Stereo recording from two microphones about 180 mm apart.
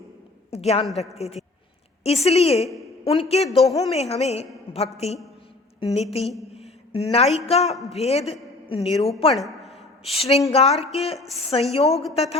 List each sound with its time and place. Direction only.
0.5 s a woman's voice: 35° left (ahead or behind)
6.5 s a sound: 35° left (ahead or behind)
7.3 s a woman's voice: 35° left (ahead or behind)
9.3 s a sound: centre (ahead or behind)
10.1 s a woman's voice: 35° left (ahead or behind)
11.9 s speech: centre (ahead or behind)
12.1 s a woman's voice: 35° left (ahead or behind)